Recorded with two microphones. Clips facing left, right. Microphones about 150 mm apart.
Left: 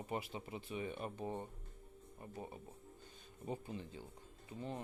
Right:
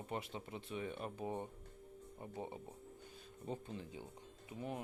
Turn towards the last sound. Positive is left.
turn(degrees=-15)  # may be behind; listen again after turning